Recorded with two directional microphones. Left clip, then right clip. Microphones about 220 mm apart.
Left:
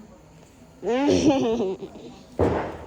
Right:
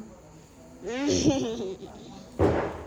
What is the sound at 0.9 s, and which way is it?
Speech, centre (ahead or behind).